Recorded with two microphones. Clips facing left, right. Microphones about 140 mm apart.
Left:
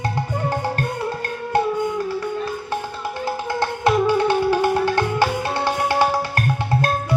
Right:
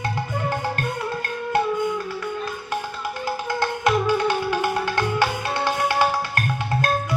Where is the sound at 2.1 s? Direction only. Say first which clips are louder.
Left 4 dB; 30° left (ahead or behind).